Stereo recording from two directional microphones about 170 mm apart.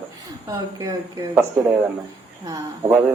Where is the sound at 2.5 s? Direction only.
15° right (ahead or behind).